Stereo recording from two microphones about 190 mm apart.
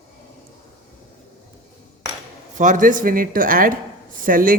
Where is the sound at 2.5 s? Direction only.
40° right (ahead or behind).